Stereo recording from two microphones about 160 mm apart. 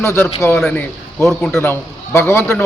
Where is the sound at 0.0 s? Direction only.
15° left (ahead or behind).